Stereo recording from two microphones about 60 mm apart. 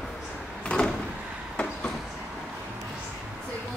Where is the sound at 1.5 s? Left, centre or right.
Left.